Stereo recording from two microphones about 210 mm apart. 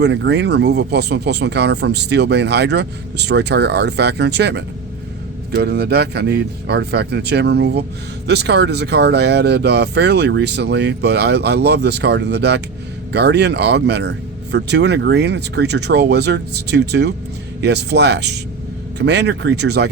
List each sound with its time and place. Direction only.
0.0 s speech: 55° right (ahead or behind)